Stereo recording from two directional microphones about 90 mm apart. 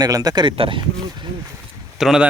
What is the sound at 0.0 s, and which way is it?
Speech, 45° right (ahead or behind).